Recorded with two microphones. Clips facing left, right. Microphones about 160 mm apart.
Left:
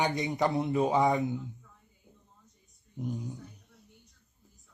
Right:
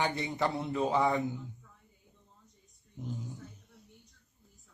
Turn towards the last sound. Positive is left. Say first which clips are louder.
# left 5 dB
turn(degrees=20)  # may be behind; listen again after turning